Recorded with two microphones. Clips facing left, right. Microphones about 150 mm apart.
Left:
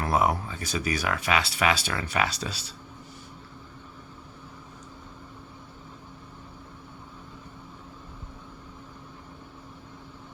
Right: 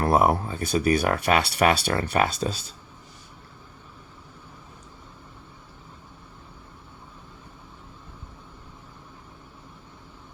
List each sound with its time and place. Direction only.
0.0 s a sound: 55° right (ahead or behind)
0.3 s speech: 30° right (ahead or behind)
0.6 s speech: 55° right (ahead or behind)